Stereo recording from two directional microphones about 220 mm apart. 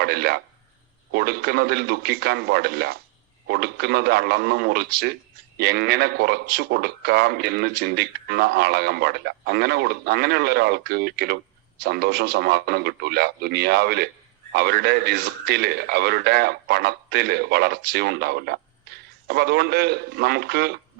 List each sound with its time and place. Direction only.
0.0 s a man's voice: 45° right (ahead or behind)